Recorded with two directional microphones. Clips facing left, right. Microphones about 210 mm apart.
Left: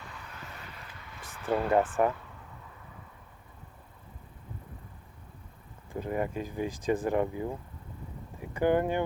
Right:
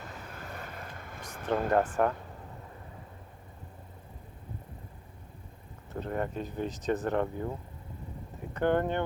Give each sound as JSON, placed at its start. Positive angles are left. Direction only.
{"t": 0.0, "sound": "vehicle", "side_deg": -45}
{"t": 1.7, "sound": "speech", "side_deg": 5}
{"t": 5.9, "sound": "speech", "side_deg": 10}
{"t": 8.5, "sound": "speech", "side_deg": 10}